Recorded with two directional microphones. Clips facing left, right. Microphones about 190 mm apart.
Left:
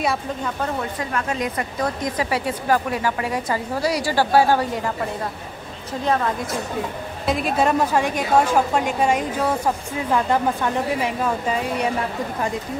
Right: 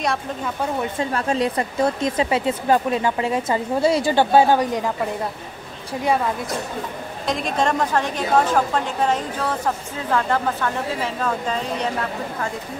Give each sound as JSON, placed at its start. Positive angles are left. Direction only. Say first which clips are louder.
{"t": 0.9, "sound": "speech", "louder": "right 3 dB", "side_deg": -30}
{"t": 7.2, "sound": "a woman's voice", "louder": "left 2 dB", "side_deg": 5}